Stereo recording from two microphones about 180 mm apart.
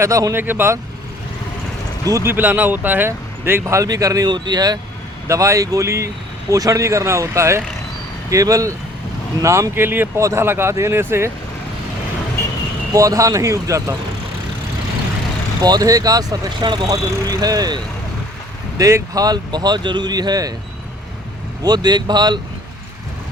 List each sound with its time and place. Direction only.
0.0 s speech: 15° right (ahead or behind)
2.0 s speech: 15° right (ahead or behind)
12.9 s speech: 20° right (ahead or behind)
15.6 s speech: 20° right (ahead or behind)
18.8 s speech: 15° right (ahead or behind)
21.6 s speech: 25° right (ahead or behind)